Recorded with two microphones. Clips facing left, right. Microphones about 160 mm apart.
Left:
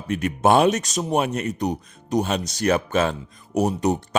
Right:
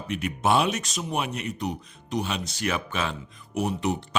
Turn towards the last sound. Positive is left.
turn(degrees=40)  # may be behind; listen again after turning